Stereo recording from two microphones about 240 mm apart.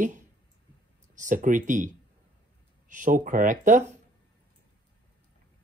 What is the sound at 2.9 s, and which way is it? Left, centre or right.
Speech, right.